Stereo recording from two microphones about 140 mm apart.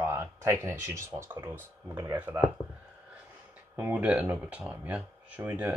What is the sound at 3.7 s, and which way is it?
Speech, 10° right (ahead or behind).